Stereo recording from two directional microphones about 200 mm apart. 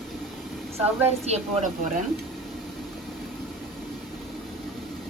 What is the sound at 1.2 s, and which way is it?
Speech, 35° right (ahead or behind).